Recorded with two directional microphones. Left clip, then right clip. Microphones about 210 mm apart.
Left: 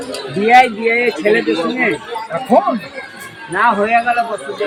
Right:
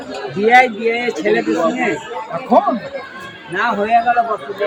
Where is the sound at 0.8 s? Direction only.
25° left (ahead or behind).